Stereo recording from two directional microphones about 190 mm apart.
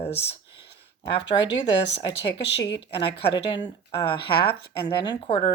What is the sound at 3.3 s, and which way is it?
Speech, 25° left (ahead or behind).